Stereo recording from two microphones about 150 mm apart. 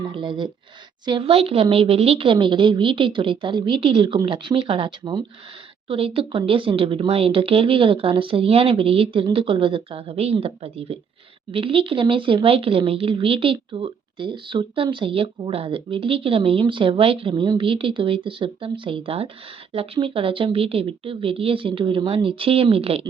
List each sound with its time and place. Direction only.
0.0 s speech: 30° right (ahead or behind)